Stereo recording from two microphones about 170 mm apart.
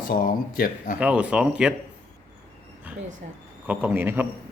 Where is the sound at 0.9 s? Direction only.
10° right (ahead or behind).